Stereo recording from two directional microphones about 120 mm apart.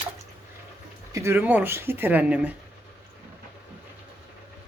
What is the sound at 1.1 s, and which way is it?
Speech, 20° right (ahead or behind).